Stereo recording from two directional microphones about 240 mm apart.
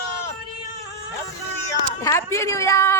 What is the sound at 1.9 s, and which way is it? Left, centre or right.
Speech, centre.